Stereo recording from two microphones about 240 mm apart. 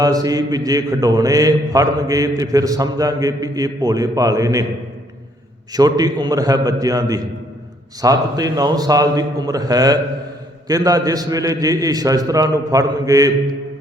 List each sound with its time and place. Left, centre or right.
0.0 s a man's voice: centre
5.7 s a man's voice: centre